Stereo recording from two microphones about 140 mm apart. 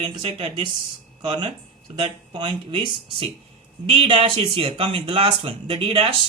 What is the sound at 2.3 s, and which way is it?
Speech, 35° right (ahead or behind).